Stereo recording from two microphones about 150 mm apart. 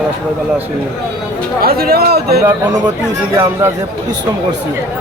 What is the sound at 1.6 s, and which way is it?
Speech, 90° right.